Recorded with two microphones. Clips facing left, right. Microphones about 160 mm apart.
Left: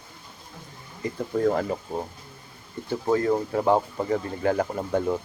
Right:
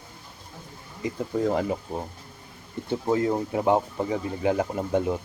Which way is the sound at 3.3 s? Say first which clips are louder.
Left 1 dB; 10° right (ahead or behind).